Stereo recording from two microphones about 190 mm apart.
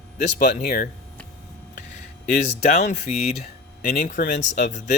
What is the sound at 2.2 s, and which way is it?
Speech, 35° left (ahead or behind).